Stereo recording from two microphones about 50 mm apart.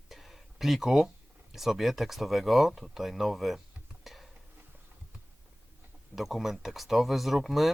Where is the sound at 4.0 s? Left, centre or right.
Centre.